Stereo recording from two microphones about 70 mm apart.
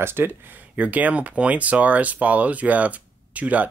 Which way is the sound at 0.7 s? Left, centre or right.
Right.